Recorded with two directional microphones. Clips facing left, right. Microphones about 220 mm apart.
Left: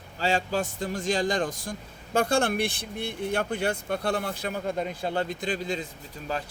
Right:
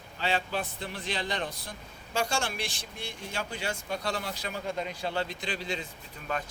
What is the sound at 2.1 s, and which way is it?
Speech, 55° left (ahead or behind).